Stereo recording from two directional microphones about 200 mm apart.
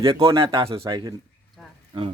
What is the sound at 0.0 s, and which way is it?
Speech, 25° right (ahead or behind).